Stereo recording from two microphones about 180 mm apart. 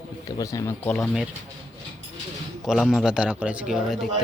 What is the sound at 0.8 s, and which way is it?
Speech, centre (ahead or behind).